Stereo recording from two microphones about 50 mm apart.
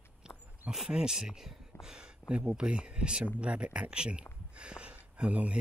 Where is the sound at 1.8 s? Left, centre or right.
Centre.